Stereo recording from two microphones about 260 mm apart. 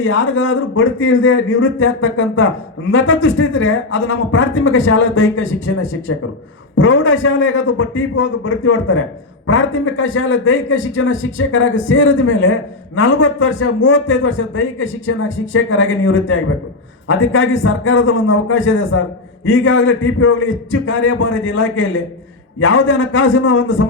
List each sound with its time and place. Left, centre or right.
0.0 s a man's voice: left